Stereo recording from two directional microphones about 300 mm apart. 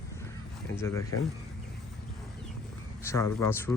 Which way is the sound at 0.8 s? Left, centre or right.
Centre.